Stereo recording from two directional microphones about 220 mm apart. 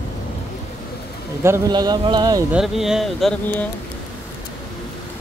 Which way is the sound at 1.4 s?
15° right (ahead or behind).